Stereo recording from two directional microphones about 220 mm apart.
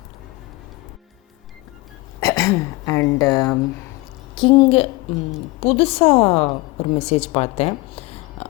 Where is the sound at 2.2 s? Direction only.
15° left (ahead or behind).